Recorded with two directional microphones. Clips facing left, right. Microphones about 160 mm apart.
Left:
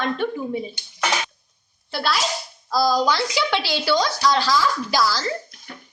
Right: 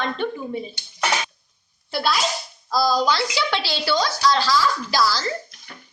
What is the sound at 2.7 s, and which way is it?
A woman's voice, 15° left (ahead or behind).